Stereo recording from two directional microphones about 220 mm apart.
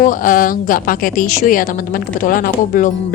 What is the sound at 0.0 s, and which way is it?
Speech, 40° left (ahead or behind).